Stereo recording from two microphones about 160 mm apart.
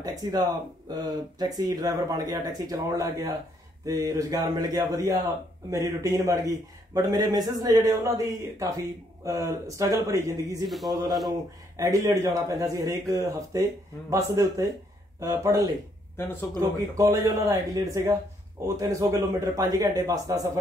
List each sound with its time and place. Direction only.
0.0 s a man's voice: 25° right (ahead or behind)
10.6 s speech: centre (ahead or behind)
11.7 s a man's voice: 20° right (ahead or behind)
16.2 s speech: 15° left (ahead or behind)
16.5 s a man's voice: 20° right (ahead or behind)